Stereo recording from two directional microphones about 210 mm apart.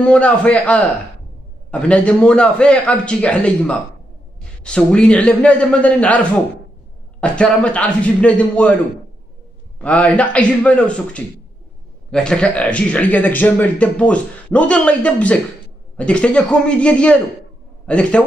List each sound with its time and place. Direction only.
0.0 s a man's voice: 5° left (ahead or behind)
9.8 s a man's voice: 5° left (ahead or behind)